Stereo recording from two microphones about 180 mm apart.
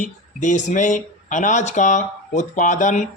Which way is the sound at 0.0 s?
45° left (ahead or behind).